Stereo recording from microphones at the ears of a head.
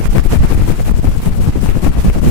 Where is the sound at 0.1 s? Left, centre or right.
Left.